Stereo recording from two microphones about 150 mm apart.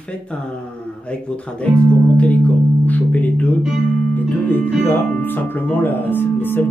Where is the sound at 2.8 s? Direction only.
10° left (ahead or behind).